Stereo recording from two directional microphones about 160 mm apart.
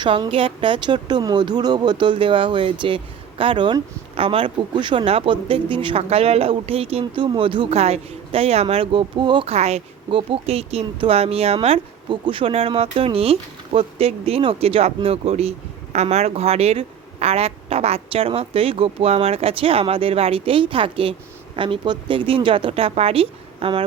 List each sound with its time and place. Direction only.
0.0 s speech: 30° right (ahead or behind)